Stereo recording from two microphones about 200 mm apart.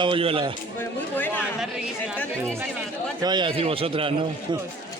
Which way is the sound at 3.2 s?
20° right (ahead or behind).